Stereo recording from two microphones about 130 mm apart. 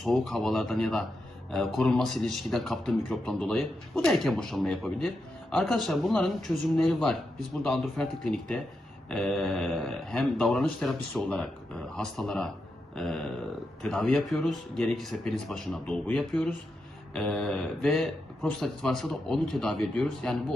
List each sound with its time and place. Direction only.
0.0 s a man's voice: centre (ahead or behind)
17.6 s a man's voice: centre (ahead or behind)